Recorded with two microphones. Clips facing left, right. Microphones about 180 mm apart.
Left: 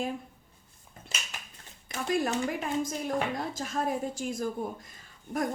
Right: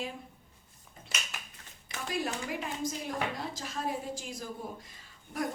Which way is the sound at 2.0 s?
50° left (ahead or behind).